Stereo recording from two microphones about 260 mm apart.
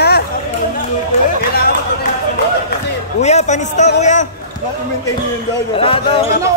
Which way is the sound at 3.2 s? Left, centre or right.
Left.